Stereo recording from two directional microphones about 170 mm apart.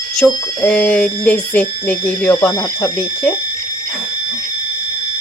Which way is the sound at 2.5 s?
20° left (ahead or behind).